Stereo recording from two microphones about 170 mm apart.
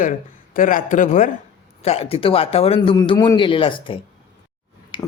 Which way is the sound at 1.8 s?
35° left (ahead or behind).